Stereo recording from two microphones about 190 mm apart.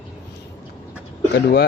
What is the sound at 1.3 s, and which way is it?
Speech, 60° left (ahead or behind).